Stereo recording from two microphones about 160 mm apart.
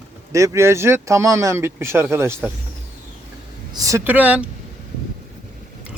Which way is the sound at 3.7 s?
20° right (ahead or behind).